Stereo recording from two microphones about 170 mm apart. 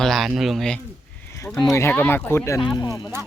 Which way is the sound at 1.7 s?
15° left (ahead or behind).